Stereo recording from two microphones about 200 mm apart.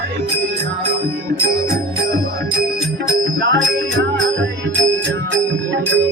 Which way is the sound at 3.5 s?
65° right (ahead or behind).